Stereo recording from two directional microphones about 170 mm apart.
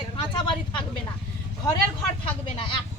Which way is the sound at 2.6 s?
30° left (ahead or behind).